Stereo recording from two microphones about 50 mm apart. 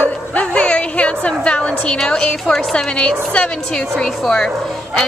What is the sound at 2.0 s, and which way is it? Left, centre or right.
A woman's voice, centre.